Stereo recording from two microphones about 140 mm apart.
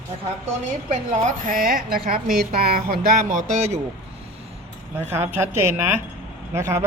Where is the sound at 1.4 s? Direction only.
85° right.